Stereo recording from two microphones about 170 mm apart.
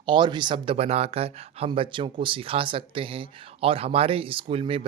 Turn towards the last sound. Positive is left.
turn(degrees=-35)  # may be behind; listen again after turning